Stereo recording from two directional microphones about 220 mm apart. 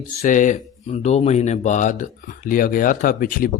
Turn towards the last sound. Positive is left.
turn(degrees=40)  # may be behind; listen again after turning